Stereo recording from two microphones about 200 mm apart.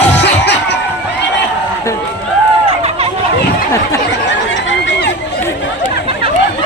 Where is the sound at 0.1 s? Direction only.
60° left (ahead or behind).